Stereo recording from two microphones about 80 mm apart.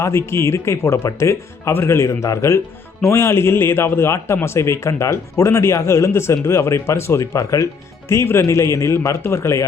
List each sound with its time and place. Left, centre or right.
0.0 s a man's voice: left